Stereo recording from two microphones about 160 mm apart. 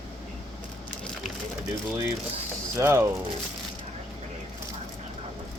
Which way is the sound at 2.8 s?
15° right (ahead or behind).